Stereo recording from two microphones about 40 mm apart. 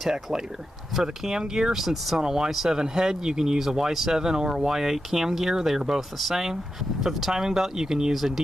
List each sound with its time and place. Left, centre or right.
0.1 s speech: centre
8.1 s speech: centre